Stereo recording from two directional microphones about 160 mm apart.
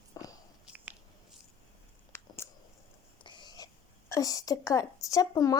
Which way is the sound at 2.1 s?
15° left (ahead or behind).